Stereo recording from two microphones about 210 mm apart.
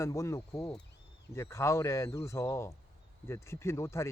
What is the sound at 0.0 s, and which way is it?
Speech, 15° left (ahead or behind).